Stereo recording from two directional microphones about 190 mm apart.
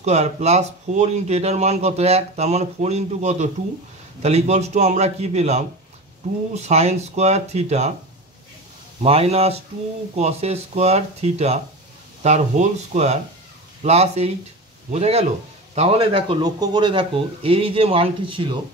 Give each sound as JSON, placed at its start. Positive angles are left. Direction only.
{"t": 0.0, "sound": "speech", "side_deg": -35}
{"t": 9.0, "sound": "speech", "side_deg": -30}